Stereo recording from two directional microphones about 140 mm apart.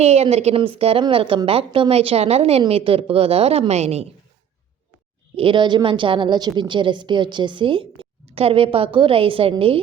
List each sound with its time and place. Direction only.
0.0 s a woman's voice: 50° right (ahead or behind)
5.4 s a woman's voice: 35° right (ahead or behind)